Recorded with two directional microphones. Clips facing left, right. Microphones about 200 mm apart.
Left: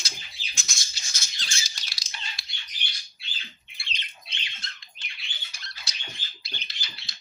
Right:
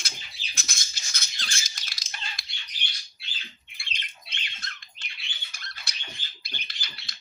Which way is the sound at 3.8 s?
50° right (ahead or behind).